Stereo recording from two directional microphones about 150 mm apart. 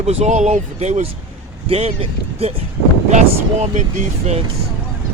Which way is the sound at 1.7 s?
40° right (ahead or behind).